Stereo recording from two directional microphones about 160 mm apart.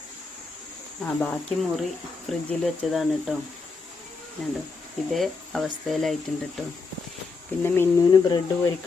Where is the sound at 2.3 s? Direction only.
Centre (ahead or behind).